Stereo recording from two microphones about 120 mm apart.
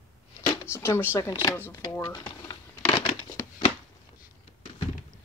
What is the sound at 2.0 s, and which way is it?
Speech, 35° left (ahead or behind).